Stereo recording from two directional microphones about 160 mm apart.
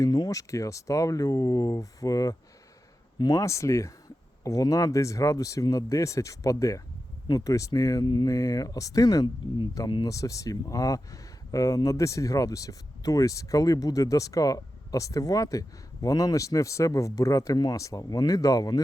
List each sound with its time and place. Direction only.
0.0 s speech: 20° left (ahead or behind)